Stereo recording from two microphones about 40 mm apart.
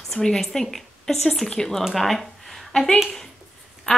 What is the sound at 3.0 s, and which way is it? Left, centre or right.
Speech, centre.